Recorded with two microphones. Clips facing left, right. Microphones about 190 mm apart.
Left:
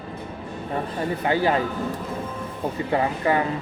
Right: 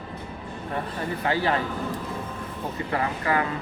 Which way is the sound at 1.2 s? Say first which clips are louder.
Left 3 dB; 20° left (ahead or behind).